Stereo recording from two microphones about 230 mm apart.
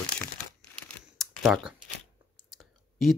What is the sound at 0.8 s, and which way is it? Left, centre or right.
Typing, centre.